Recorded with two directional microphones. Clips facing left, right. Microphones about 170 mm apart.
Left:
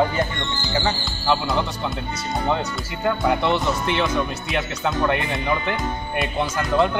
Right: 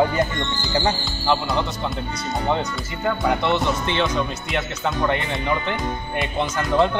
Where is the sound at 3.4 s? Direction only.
15° left (ahead or behind).